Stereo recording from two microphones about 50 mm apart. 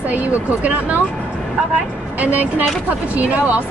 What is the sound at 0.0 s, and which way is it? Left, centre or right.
Speech, right.